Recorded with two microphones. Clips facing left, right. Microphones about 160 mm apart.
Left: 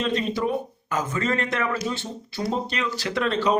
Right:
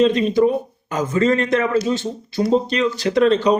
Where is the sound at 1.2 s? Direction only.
20° right (ahead or behind).